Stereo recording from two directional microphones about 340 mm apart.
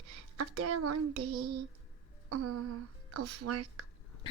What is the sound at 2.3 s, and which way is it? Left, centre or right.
Speech, right.